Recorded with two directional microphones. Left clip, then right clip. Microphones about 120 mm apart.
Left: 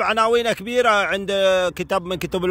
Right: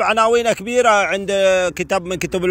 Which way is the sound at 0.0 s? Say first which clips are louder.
Right 3 dB; 35° left (ahead or behind).